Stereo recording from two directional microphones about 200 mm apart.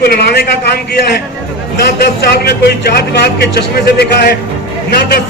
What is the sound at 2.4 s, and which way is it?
A man's voice, 50° left (ahead or behind).